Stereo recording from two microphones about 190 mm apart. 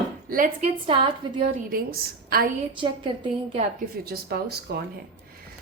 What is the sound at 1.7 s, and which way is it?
Speech, 50° right (ahead or behind).